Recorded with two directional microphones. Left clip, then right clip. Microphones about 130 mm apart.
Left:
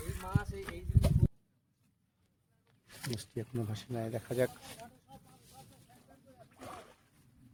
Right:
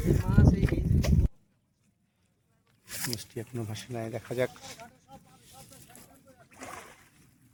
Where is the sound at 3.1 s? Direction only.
5° right (ahead or behind).